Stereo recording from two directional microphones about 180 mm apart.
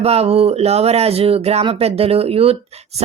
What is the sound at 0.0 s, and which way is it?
Speech, 35° right (ahead or behind).